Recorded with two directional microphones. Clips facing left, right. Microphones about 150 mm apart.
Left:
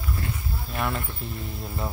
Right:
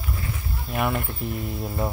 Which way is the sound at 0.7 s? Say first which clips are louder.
Right 4 dB; 15° right (ahead or behind).